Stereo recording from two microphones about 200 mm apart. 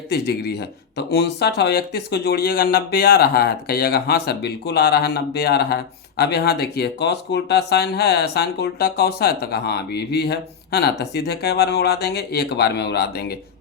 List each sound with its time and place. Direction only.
0.1 s speech: 50° left (ahead or behind)